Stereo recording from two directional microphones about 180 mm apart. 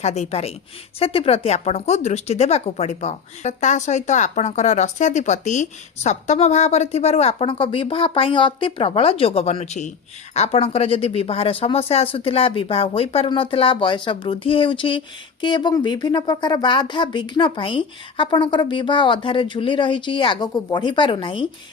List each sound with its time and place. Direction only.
0.0 s speech: 35° left (ahead or behind)